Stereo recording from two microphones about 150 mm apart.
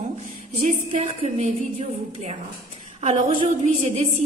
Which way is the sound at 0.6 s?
45° right (ahead or behind).